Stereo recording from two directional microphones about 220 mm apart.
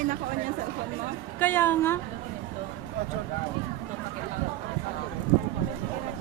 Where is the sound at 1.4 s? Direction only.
10° left (ahead or behind).